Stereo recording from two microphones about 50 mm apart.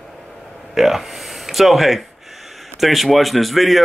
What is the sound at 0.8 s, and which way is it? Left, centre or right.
Speech, centre.